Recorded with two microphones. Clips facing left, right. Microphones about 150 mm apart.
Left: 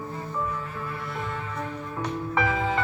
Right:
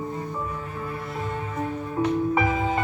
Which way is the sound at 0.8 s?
30° right (ahead or behind).